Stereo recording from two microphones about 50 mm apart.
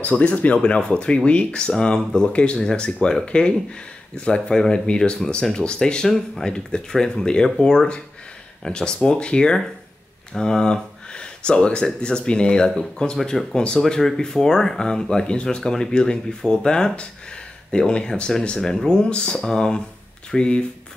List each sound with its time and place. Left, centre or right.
0.0 s speech: left